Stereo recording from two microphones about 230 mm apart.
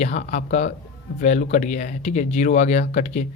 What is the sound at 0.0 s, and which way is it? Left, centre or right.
Speech, left.